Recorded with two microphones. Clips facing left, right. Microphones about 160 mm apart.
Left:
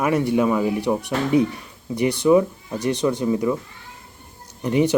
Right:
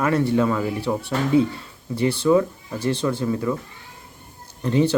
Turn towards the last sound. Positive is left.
turn(degrees=15)  # may be behind; listen again after turning